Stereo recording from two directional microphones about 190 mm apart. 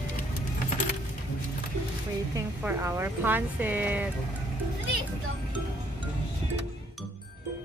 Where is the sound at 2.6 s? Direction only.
10° right (ahead or behind).